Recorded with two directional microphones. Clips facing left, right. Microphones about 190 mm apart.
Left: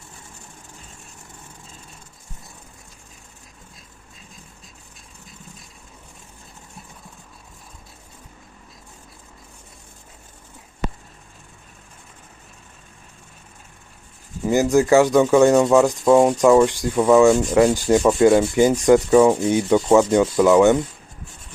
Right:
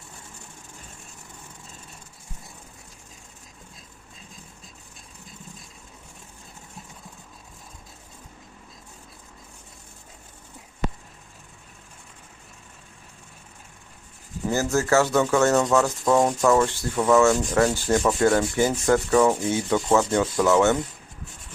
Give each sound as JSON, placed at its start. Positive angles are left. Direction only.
{"t": 14.4, "sound": "sanding", "side_deg": 15}